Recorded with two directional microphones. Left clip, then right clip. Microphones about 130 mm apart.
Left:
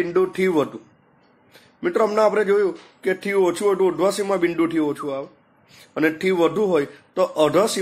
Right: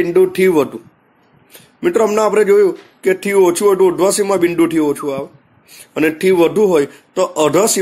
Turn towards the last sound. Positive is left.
turn(degrees=-30)  # may be behind; listen again after turning